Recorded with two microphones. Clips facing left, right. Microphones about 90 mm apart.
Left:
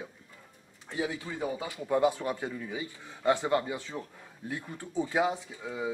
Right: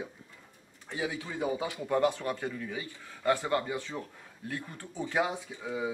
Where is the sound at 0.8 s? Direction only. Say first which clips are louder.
Left 1 dB; 10° right (ahead or behind).